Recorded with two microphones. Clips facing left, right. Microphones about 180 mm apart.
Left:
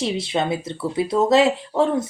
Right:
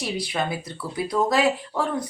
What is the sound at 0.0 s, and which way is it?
A woman's voice, 25° left (ahead or behind).